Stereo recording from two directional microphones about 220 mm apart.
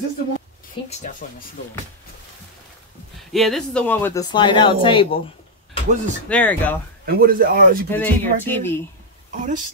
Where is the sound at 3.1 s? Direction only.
Centre (ahead or behind); by 5.2 s 25° left (ahead or behind).